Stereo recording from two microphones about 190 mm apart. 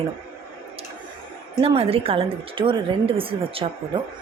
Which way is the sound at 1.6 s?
30° right (ahead or behind).